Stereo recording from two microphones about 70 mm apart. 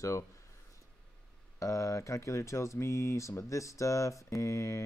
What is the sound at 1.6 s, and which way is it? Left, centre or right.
Speech, left.